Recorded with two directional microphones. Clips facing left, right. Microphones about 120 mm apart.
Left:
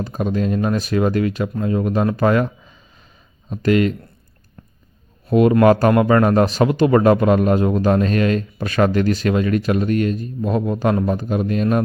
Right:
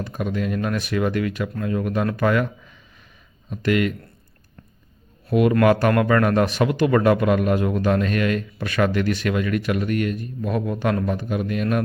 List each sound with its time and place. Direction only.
0.0 s speech: 35° left (ahead or behind)
5.3 s speech: 30° left (ahead or behind)